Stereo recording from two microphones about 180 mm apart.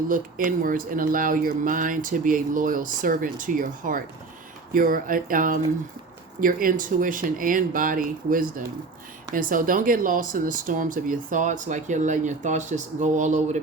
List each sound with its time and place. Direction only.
0.1 s speech: 50° right (ahead or behind)